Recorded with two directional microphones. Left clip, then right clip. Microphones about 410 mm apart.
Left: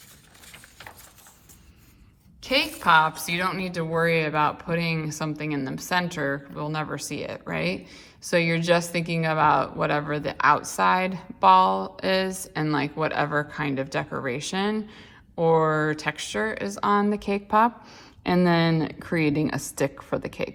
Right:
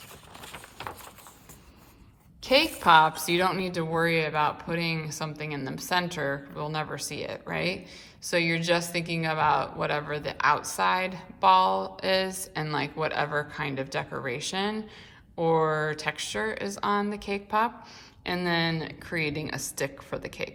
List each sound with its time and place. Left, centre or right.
2.4 s a woman's voice: centre